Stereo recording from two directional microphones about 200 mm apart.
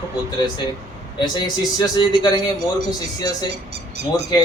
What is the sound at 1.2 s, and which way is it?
A man's voice, 20° left (ahead or behind).